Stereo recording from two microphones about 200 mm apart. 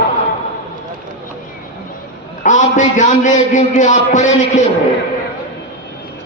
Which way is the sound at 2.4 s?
40° left (ahead or behind).